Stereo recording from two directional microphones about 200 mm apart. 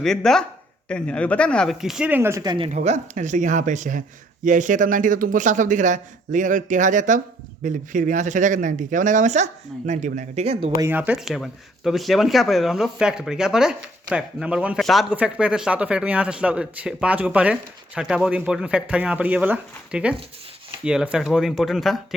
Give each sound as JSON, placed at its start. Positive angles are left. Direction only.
{"t": 0.0, "sound": "speech", "side_deg": 5}
{"t": 2.7, "sound": "speech", "side_deg": -35}
{"t": 10.8, "sound": "speech", "side_deg": -10}